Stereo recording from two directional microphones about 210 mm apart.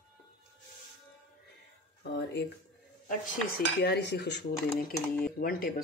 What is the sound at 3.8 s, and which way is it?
Speech, 50° left (ahead or behind).